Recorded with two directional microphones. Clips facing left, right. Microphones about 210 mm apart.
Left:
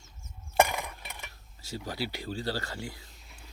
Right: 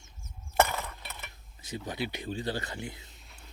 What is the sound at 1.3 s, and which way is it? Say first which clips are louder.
Speech: right 1 dB; 20° right (ahead or behind).